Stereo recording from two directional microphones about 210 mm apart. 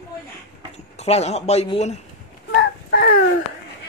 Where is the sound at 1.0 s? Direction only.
30° left (ahead or behind).